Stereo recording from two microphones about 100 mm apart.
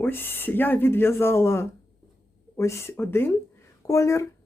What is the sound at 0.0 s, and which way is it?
Speech, 20° left (ahead or behind).